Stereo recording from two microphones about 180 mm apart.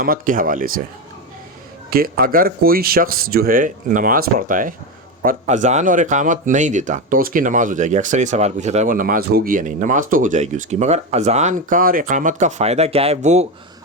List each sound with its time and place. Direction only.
0.0 s speech: 50° right (ahead or behind)
1.9 s speech: 55° right (ahead or behind); by 13.5 s 40° right (ahead or behind)